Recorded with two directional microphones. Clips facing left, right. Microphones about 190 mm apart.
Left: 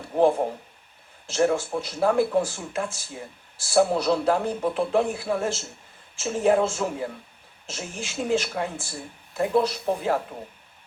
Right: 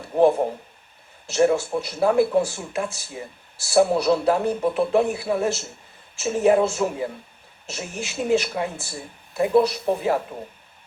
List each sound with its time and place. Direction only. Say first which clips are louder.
1.3 s speech: right 3 dB; 5° right (ahead or behind)